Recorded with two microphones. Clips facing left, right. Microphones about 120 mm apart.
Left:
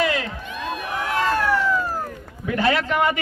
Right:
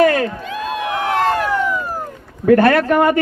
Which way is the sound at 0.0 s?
50° right (ahead or behind).